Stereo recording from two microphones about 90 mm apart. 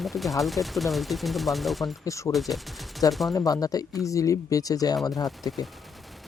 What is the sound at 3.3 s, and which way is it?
Speech, 40° left (ahead or behind).